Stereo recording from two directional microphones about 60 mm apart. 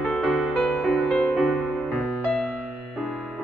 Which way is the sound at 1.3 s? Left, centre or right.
Centre.